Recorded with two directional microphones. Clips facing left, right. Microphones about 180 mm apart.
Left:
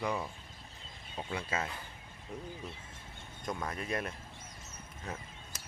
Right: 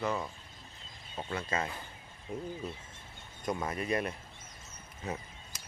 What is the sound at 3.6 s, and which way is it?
Speech, 5° right (ahead or behind).